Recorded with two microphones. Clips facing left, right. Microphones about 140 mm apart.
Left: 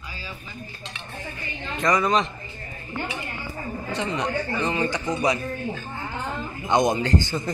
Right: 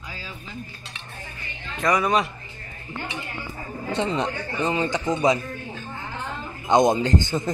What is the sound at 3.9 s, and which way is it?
Speech, 25° right (ahead or behind).